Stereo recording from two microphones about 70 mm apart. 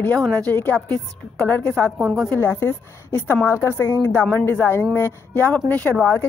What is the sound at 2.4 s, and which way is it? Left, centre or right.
Speech, left.